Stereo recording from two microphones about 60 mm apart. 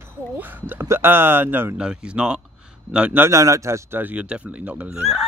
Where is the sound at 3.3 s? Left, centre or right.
Right.